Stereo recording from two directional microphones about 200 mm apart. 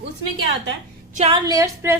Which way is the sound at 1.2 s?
25° right (ahead or behind).